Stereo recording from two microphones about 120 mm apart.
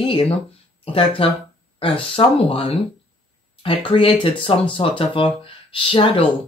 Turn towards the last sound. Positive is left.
turn(degrees=45)  # may be behind; listen again after turning